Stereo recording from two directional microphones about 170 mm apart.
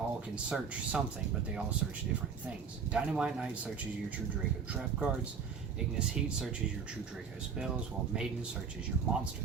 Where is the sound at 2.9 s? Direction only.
5° right (ahead or behind).